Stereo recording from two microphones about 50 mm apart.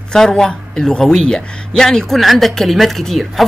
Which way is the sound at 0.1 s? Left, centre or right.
Centre.